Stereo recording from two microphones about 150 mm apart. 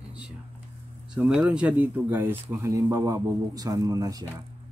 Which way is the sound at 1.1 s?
5° right (ahead or behind).